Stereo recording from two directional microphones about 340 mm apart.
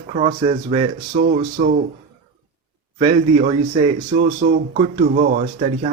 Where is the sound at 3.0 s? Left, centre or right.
Centre.